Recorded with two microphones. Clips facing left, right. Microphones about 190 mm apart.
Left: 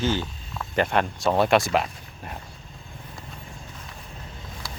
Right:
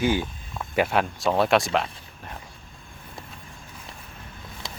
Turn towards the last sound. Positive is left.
turn(degrees=-25)  # may be behind; listen again after turning